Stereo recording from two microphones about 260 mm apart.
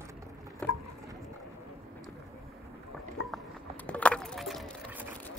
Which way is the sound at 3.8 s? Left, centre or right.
Centre.